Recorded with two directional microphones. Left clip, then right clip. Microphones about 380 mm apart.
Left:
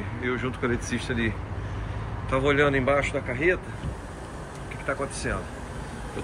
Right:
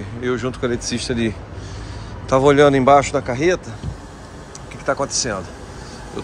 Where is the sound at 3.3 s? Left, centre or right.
Right.